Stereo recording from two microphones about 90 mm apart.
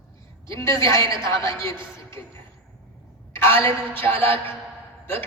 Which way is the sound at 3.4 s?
90° right.